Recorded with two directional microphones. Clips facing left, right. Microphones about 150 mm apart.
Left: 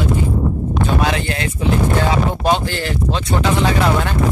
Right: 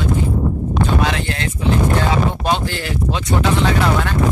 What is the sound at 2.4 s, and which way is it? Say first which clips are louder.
Speech: left 2 dB; centre (ahead or behind).